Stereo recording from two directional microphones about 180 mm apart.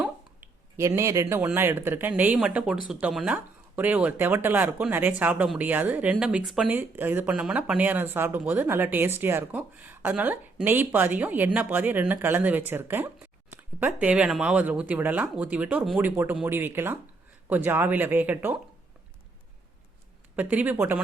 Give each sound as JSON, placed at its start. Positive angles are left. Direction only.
{"t": 0.8, "sound": "speech", "side_deg": -15}
{"t": 20.3, "sound": "speech", "side_deg": -10}